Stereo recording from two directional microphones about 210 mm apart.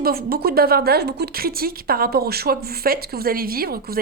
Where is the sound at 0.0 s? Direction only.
45° right (ahead or behind).